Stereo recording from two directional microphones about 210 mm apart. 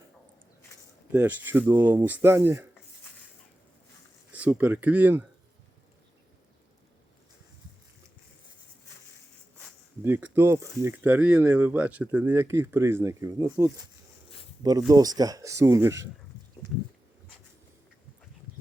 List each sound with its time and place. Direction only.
1.1 s speech: 10° right (ahead or behind)
4.3 s speech: 5° right (ahead or behind)
9.6 s speech: 10° right (ahead or behind)